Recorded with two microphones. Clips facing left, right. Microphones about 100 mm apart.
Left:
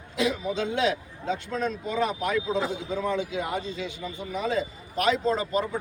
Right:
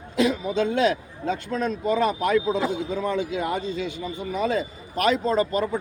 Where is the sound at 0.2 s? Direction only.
45° right (ahead or behind).